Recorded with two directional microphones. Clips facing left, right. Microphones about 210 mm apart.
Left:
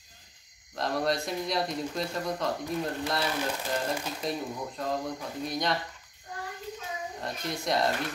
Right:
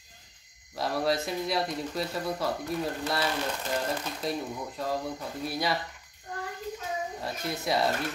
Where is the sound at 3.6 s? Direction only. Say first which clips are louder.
Even; 10° left (ahead or behind).